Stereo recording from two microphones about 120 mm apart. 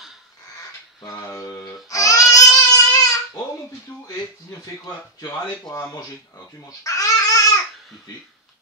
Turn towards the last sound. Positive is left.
turn(degrees=30)  # may be behind; listen again after turning